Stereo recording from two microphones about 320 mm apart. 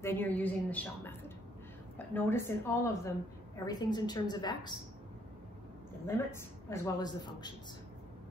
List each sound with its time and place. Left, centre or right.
0.0 s a woman's voice: centre
6.0 s a woman's voice: centre